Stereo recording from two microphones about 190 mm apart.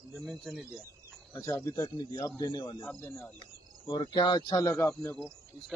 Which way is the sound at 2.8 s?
10° left (ahead or behind).